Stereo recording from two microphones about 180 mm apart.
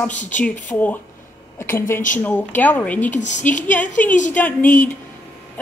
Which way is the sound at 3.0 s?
40° left (ahead or behind).